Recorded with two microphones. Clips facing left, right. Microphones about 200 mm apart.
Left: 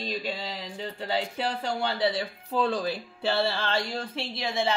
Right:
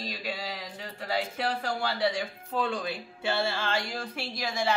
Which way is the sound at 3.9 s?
30° left (ahead or behind).